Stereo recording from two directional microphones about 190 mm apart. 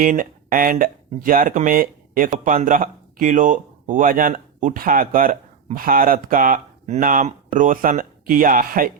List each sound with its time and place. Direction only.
0.0 s speech: 45° right (ahead or behind)